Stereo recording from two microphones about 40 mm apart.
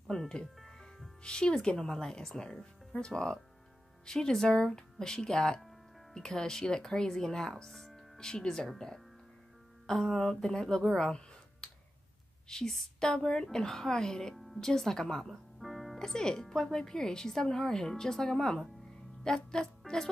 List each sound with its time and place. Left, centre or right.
0.1 s speech: centre
0.6 s music: centre
1.2 s speech: left
7.9 s music: centre
8.7 s speech: centre
11.6 s tick: centre
12.4 s speech: centre
14.3 s music: centre
14.6 s speech: centre
15.6 s music: centre
16.0 s speech: centre